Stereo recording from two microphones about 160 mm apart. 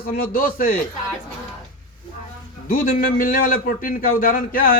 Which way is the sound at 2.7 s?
60° left (ahead or behind).